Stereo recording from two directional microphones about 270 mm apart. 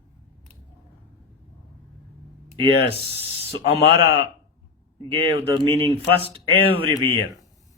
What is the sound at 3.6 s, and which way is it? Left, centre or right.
Speech, left.